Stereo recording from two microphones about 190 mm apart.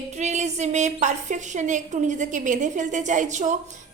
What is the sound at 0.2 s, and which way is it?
A woman's voice, 35° right (ahead or behind).